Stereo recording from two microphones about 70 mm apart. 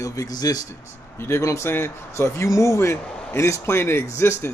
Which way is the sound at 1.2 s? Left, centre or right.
Left.